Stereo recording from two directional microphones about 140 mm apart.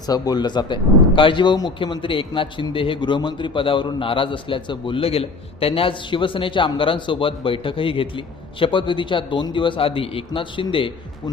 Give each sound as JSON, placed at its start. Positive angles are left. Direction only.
{"t": 0.1, "sound": "a man's voice", "side_deg": 30}